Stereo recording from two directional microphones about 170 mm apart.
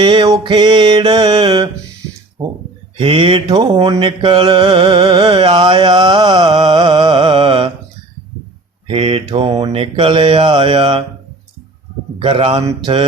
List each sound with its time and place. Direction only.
0.0 s mantra: 25° right (ahead or behind)
3.0 s mantra: 30° right (ahead or behind)
8.9 s mantra: 30° right (ahead or behind)
12.2 s mantra: 30° right (ahead or behind)